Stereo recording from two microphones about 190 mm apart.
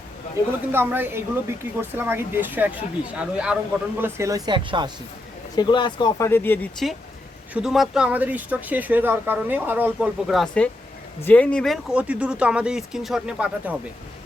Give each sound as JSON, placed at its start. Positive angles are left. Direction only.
{"t": 0.7, "sound": "speech", "side_deg": -10}
{"t": 4.0, "sound": "speech", "side_deg": -15}
{"t": 5.5, "sound": "speech", "side_deg": 25}